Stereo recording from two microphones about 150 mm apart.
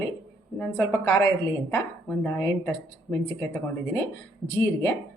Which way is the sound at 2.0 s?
10° left (ahead or behind).